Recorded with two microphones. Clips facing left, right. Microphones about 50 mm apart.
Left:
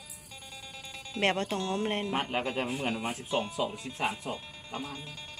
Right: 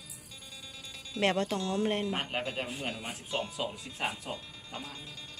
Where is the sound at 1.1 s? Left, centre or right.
Left.